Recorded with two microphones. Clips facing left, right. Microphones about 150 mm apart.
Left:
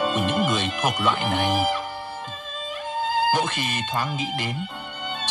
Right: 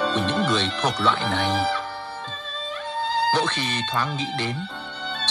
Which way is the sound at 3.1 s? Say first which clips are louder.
Even; 50° left (ahead or behind).